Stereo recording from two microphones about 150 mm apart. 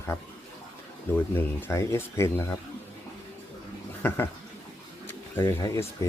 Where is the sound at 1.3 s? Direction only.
15° left (ahead or behind).